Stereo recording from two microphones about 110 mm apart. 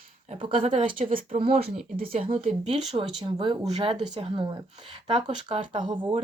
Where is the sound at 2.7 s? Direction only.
65° right (ahead or behind).